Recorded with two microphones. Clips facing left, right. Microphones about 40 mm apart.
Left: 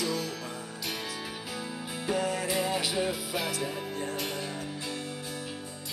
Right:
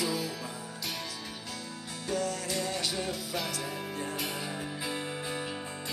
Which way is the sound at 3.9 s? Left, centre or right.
Centre.